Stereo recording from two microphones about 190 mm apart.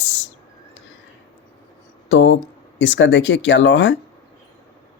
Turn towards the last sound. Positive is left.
turn(degrees=70)  # may be behind; listen again after turning